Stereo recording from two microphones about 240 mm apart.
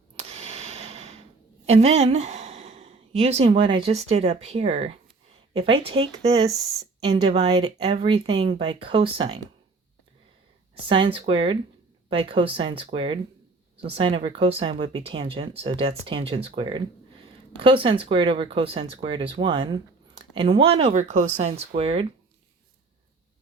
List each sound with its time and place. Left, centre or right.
0.2 s a sound: right
1.6 s a woman's voice: right
10.8 s speech: right